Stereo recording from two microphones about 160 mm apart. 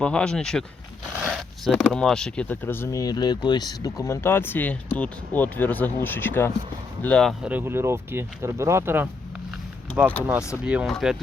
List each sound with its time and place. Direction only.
0.0 s speech: 5° left (ahead or behind)
7.4 s speech: 10° right (ahead or behind)